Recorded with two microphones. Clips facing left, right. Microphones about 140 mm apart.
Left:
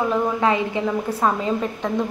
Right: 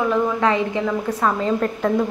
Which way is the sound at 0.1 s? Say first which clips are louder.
Right 1 dB; 20° left (ahead or behind).